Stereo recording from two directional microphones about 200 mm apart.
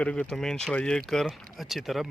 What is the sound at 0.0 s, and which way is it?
Speech, 5° left (ahead or behind).